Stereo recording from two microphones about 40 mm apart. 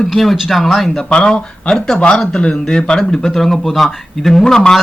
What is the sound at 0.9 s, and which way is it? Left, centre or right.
Speech, left.